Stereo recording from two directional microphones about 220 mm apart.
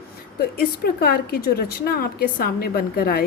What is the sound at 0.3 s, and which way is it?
A woman's voice, 45° left (ahead or behind).